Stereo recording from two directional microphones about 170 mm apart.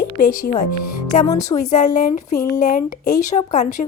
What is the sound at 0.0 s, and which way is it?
Speech, 60° left (ahead or behind).